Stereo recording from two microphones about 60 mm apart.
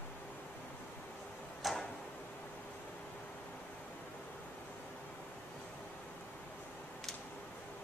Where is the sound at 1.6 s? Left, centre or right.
Centre.